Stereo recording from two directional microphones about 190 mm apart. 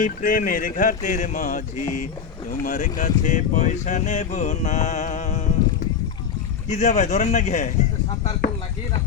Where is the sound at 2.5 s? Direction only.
45° left (ahead or behind).